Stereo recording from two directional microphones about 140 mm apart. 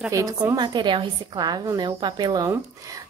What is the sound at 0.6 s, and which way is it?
A woman's voice, 35° right (ahead or behind).